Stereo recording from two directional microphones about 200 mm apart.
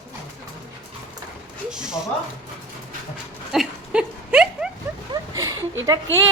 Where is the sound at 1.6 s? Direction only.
5° right (ahead or behind).